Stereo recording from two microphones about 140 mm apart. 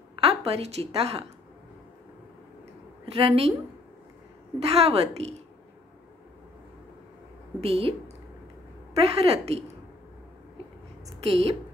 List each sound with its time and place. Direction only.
0.1 s a woman's voice: 45° right (ahead or behind)
3.1 s a woman's voice: 45° right (ahead or behind)
4.6 s a woman's voice: 45° right (ahead or behind)
7.6 s a woman's voice: 45° right (ahead or behind)
8.9 s a woman's voice: 45° right (ahead or behind)
11.1 s a woman's voice: 45° right (ahead or behind)